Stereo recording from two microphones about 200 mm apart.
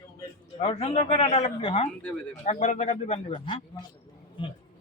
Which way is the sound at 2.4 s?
35° left (ahead or behind).